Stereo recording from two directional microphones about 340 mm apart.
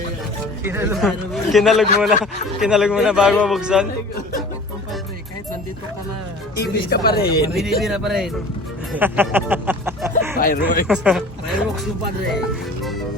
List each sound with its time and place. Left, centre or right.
0.6 s a man's voice: centre
6.6 s speech: left
7.8 s a man's voice: centre
10.4 s speech: left
10.8 s speech: centre